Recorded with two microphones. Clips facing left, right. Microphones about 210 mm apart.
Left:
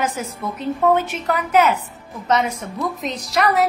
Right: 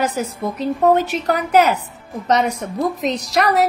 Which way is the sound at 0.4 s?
35° right (ahead or behind).